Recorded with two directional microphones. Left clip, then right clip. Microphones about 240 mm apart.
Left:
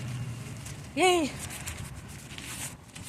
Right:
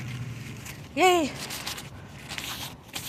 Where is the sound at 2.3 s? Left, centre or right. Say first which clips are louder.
Right 6 dB; right.